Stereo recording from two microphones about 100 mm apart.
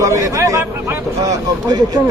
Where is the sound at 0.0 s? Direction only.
35° right (ahead or behind).